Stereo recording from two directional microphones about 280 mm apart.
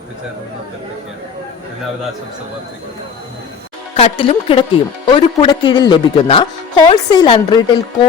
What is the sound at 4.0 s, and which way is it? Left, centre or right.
A woman's voice, left.